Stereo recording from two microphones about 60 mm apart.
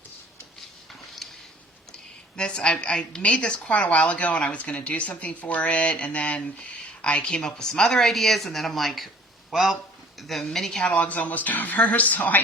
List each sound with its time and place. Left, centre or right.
1.9 s a woman's voice: centre
10.8 s a woman's voice: left